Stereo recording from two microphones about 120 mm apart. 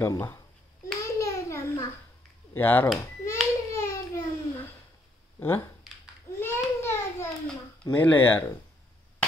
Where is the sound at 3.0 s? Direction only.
25° left (ahead or behind).